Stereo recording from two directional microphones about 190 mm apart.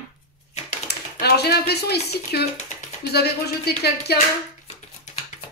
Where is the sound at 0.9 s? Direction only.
60° left (ahead or behind).